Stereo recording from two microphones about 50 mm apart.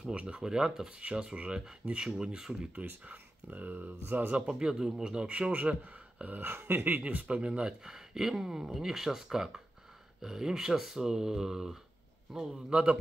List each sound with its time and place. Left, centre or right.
0.0 s speech: centre
2.7 s speech: right
4.4 s speech: centre
5.5 s speech: right
6.7 s speech: right
7.0 s speech: right
7.8 s speech: centre